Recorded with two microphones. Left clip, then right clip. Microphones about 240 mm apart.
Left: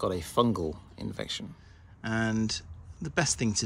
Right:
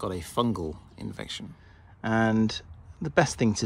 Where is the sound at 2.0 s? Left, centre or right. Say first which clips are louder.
Right 6 dB; centre.